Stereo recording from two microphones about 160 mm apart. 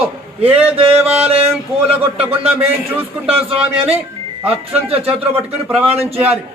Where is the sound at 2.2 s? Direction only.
15° right (ahead or behind).